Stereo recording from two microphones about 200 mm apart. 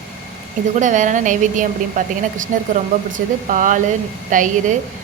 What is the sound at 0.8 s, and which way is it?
A woman's voice, 40° right (ahead or behind).